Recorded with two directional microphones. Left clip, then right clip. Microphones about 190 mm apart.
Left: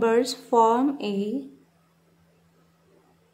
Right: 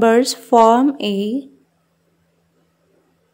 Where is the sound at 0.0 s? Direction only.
40° right (ahead or behind).